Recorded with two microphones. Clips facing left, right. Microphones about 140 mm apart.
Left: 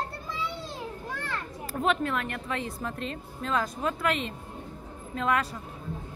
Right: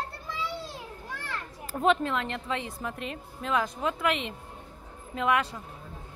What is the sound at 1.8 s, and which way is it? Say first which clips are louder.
A woman's voice: right 2 dB; 25° right (ahead or behind).